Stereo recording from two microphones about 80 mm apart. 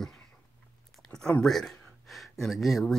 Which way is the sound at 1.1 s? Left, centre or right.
Centre.